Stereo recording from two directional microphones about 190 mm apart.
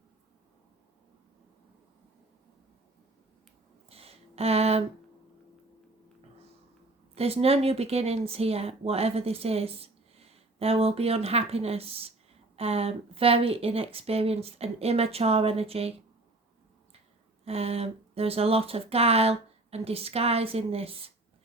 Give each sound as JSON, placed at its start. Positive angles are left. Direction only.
{"t": 3.8, "sound": "a sound", "side_deg": -30}
{"t": 7.2, "sound": "speech", "side_deg": -30}
{"t": 17.4, "sound": "speech", "side_deg": -30}